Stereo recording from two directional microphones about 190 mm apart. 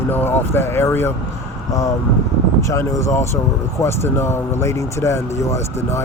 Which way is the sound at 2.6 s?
15° left (ahead or behind).